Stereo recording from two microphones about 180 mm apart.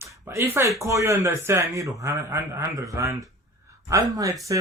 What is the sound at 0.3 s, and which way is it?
A man's voice, 15° right (ahead or behind).